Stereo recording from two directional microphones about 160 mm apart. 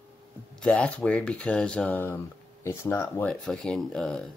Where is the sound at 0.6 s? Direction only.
5° left (ahead or behind).